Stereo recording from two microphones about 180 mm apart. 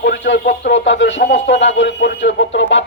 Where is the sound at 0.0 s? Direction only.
70° left (ahead or behind).